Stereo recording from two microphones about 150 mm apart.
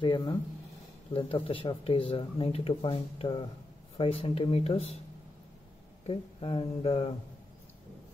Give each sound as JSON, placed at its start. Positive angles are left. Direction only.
{"t": 0.0, "sound": "speech", "side_deg": 30}
{"t": 6.0, "sound": "speech", "side_deg": 40}